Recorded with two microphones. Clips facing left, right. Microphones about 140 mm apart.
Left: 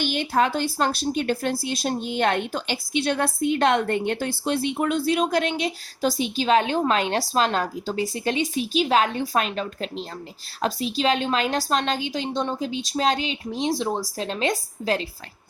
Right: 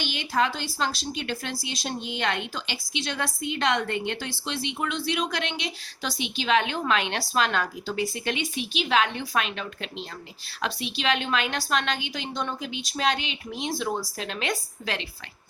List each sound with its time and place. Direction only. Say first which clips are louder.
0.0 s speech: left 4 dB; 50° left (ahead or behind)